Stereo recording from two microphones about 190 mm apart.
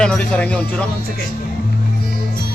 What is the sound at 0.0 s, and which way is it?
Speech, 5° left (ahead or behind).